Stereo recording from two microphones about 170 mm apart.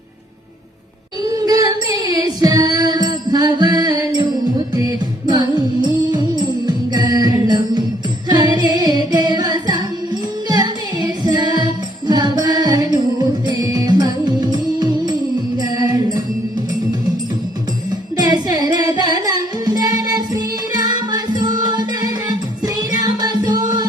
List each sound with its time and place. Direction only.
1.3 s music: 20° right (ahead or behind)
18.2 s music: 25° right (ahead or behind)